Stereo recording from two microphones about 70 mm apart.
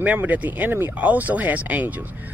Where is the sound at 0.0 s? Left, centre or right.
Right.